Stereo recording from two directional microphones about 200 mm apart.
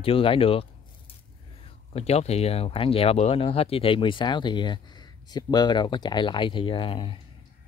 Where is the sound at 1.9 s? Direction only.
30° left (ahead or behind).